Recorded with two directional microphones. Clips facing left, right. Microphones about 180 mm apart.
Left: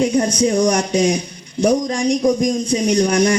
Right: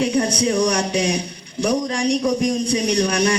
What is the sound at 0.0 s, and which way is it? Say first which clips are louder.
A man's voice: left 3 dB; 35° right (ahead or behind).